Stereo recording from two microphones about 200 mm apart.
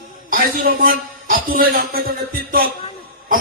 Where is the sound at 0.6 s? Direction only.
45° right (ahead or behind).